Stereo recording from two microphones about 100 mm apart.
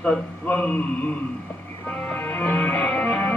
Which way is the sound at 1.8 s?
15° left (ahead or behind).